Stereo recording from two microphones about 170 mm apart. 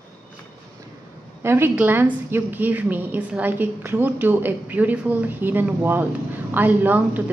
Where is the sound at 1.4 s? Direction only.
15° right (ahead or behind).